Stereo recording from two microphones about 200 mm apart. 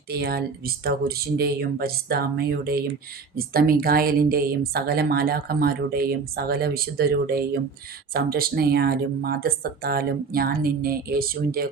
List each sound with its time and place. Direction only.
0.1 s speech: 50° right (ahead or behind)